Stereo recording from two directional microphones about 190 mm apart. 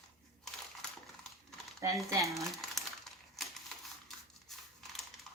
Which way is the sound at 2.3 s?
Centre (ahead or behind).